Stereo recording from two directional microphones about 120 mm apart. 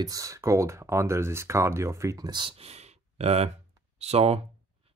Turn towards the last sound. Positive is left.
turn(degrees=-60)  # may be behind; listen again after turning